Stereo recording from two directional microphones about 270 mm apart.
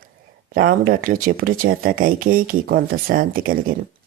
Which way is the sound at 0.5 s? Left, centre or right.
Right.